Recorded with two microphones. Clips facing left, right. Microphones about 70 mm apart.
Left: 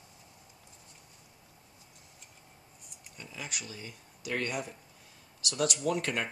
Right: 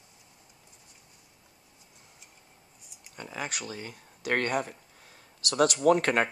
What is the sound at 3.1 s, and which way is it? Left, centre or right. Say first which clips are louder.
Speech: right 6 dB; right.